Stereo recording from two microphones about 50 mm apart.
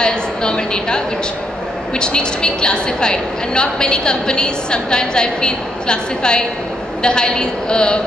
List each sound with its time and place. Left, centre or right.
0.0 s a woman's voice: centre